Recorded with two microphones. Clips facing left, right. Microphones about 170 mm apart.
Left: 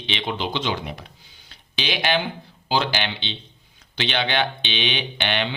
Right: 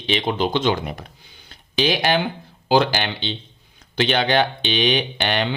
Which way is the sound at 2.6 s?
45° right (ahead or behind).